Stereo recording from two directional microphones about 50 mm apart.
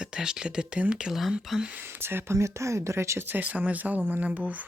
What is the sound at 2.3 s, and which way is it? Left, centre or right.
Speech, right.